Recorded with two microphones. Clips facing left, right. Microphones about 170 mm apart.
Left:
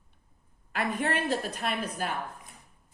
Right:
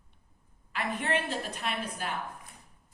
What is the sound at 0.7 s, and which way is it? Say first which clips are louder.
Speech: left 2 dB; 45° left (ahead or behind).